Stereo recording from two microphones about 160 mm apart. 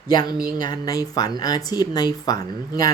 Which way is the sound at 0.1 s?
25° left (ahead or behind).